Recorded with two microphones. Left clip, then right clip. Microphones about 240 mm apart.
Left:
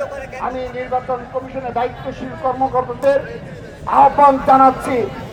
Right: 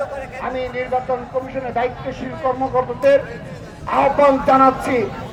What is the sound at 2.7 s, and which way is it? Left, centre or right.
A man's voice, left.